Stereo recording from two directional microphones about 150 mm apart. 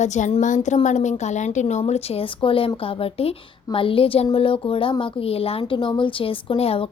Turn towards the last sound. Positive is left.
turn(degrees=40)  # may be behind; listen again after turning